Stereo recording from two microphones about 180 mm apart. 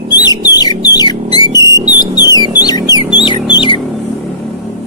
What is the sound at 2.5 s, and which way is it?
Bird, 20° left (ahead or behind).